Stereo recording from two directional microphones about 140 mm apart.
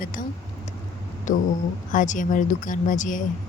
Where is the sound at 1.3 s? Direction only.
60° left (ahead or behind).